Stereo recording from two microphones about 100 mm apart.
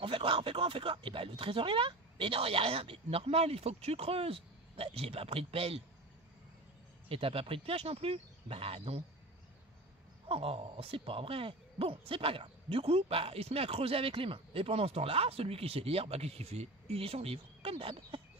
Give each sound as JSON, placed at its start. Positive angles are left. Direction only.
{"t": 0.0, "sound": "speech", "side_deg": -60}
{"t": 7.1, "sound": "speech", "side_deg": -70}
{"t": 10.2, "sound": "speech", "side_deg": -70}